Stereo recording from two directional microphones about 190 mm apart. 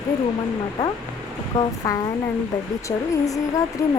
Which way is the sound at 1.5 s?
20° left (ahead or behind).